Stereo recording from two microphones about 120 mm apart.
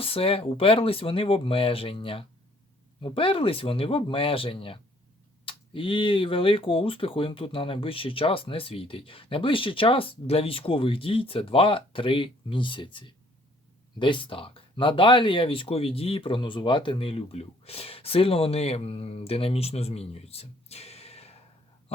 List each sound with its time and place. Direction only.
0.0 s speech: 50° left (ahead or behind)